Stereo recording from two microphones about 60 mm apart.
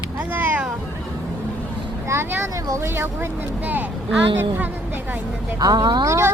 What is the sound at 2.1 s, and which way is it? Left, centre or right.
Speech, right.